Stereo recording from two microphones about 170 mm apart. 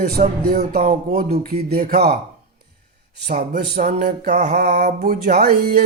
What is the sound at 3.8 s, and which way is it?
Music, 45° right (ahead or behind).